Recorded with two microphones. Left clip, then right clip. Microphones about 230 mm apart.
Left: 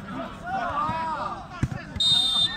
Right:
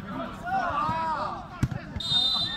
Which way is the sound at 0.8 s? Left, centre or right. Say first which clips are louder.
Even; right.